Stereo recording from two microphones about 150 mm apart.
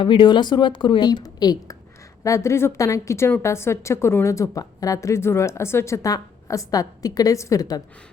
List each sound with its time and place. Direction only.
0.0 s a woman's voice: 35° left (ahead or behind)